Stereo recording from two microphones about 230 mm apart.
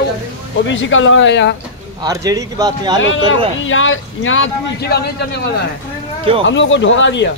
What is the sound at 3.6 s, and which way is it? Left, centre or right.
Speech, left.